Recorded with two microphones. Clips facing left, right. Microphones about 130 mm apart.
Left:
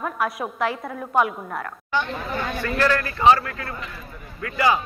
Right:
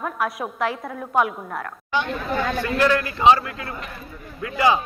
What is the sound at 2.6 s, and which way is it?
A man's voice, 15° right (ahead or behind).